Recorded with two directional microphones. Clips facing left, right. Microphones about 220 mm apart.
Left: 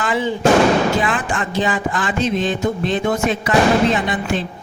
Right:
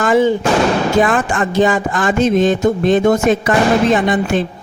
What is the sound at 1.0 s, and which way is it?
Music, 45° right (ahead or behind).